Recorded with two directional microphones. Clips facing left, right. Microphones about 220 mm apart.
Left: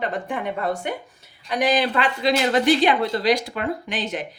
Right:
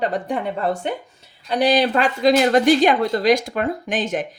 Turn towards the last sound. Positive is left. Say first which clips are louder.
# right 4 dB
turn(degrees=-45)  # may be behind; listen again after turning